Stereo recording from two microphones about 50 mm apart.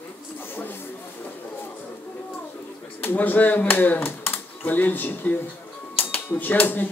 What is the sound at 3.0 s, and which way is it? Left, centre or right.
A man's voice, left.